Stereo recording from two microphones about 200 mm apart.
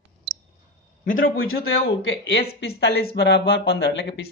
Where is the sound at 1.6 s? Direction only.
60° left (ahead or behind).